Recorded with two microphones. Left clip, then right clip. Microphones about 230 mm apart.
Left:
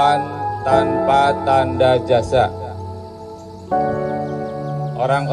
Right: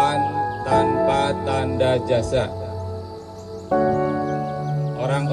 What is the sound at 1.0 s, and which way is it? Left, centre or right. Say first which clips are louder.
Music: left 5 dB; right.